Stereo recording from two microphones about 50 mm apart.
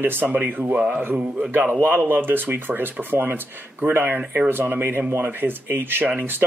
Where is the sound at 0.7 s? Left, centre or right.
Right.